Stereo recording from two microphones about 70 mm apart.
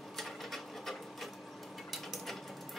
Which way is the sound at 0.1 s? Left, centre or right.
Centre.